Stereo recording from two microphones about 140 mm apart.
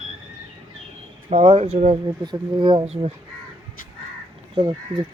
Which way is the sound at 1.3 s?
45° right (ahead or behind).